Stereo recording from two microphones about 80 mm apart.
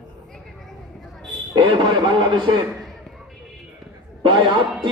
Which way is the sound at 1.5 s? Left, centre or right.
Right.